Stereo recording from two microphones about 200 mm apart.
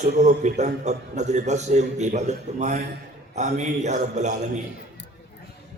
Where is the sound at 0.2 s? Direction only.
35° right (ahead or behind).